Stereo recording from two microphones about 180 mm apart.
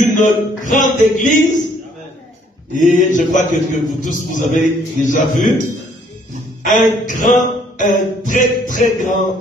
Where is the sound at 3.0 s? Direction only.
45° left (ahead or behind).